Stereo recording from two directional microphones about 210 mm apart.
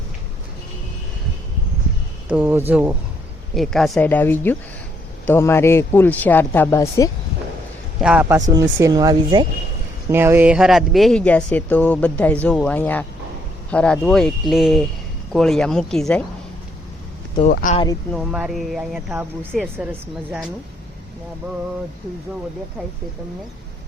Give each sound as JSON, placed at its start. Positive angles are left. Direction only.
{"t": 2.3, "sound": "a man's voice", "side_deg": -10}
{"t": 8.0, "sound": "speech", "side_deg": -5}
{"t": 8.4, "sound": "speech", "side_deg": -15}
{"t": 17.5, "sound": "speech", "side_deg": 40}
{"t": 18.1, "sound": "speech", "side_deg": 0}